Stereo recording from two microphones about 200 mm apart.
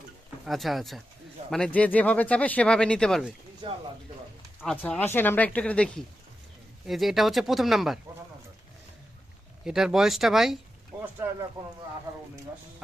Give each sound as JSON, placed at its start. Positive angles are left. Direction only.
{"t": 0.4, "sound": "speech", "side_deg": 0}
{"t": 3.6, "sound": "speech", "side_deg": -25}
{"t": 4.6, "sound": "speech", "side_deg": 5}
{"t": 9.6, "sound": "speech", "side_deg": 0}